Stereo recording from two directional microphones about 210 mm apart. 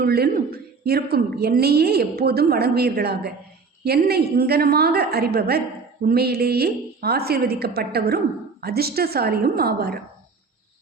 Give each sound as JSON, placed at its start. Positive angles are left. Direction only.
{"t": 0.0, "sound": "a woman's voice", "side_deg": -50}